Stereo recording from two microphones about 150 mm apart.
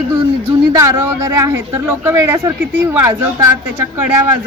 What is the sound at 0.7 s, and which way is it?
A woman's voice, 25° right (ahead or behind).